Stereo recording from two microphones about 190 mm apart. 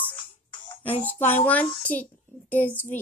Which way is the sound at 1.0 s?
10° left (ahead or behind).